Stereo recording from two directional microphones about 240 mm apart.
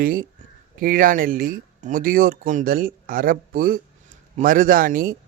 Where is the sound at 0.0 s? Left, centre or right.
Right.